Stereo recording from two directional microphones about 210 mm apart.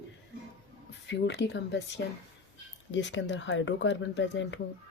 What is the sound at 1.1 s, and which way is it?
Speech, 55° left (ahead or behind).